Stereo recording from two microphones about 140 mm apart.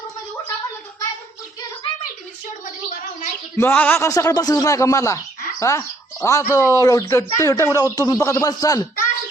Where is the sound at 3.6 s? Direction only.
15° left (ahead or behind).